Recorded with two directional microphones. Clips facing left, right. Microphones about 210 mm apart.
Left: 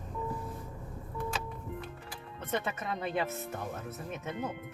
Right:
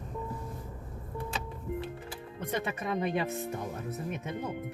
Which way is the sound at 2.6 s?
15° right (ahead or behind).